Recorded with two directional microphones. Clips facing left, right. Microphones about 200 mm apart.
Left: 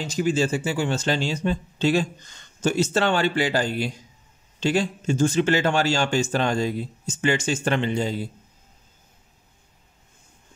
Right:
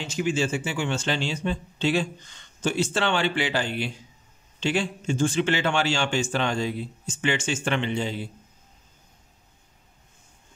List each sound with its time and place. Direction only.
0.0 s speech: 40° left (ahead or behind)